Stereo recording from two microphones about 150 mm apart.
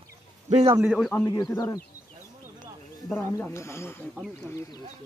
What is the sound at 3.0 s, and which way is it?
Speech, 10° left (ahead or behind).